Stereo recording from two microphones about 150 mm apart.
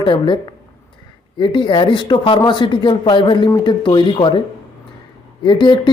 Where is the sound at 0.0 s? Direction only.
35° left (ahead or behind).